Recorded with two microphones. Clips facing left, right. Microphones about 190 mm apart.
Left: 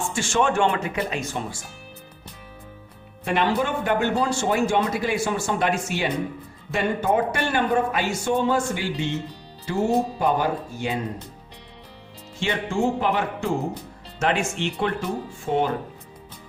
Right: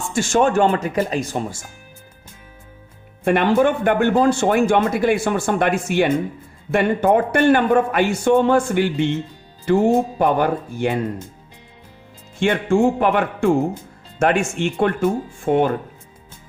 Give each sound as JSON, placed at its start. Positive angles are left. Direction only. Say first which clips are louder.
{"t": 0.1, "sound": "speech", "louder": "right 7 dB", "side_deg": -40}
{"t": 3.2, "sound": "speech", "louder": "right 7 dB", "side_deg": -55}
{"t": 12.4, "sound": "speech", "louder": "right 7 dB", "side_deg": -55}